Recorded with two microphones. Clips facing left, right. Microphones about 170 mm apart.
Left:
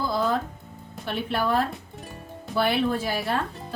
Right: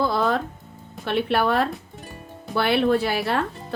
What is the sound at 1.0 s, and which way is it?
A woman's voice, 70° right (ahead or behind).